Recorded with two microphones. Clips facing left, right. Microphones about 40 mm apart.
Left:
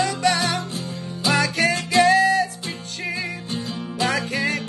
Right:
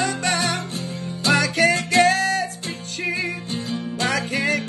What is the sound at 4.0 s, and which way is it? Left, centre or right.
Music, right.